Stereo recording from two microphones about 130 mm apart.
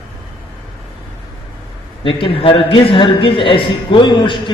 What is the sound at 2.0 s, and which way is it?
A man's voice, 45° left (ahead or behind).